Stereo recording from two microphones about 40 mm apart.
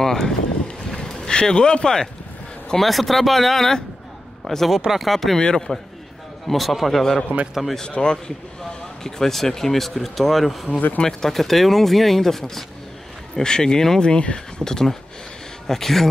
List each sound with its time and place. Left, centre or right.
0.0 s boat: centre
2.8 s speech: centre
5.4 s speech: centre
6.4 s speech: centre
7.9 s speech: left
9.0 s speech: centre
10.7 s speech: left
11.1 s speech: centre
13.4 s speech: centre